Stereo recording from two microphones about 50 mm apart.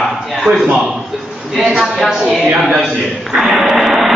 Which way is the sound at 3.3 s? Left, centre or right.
Centre.